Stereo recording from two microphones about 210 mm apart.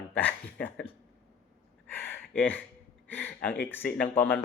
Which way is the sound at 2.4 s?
5° left (ahead or behind).